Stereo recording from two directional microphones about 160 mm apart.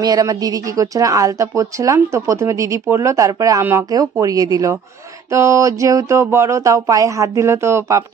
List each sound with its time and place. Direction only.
0.0 s speech: 25° right (ahead or behind)